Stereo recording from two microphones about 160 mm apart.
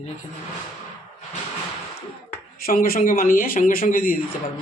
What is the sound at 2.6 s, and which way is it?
Speech, 65° left (ahead or behind).